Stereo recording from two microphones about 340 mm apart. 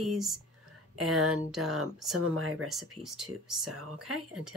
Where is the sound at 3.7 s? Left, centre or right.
Right.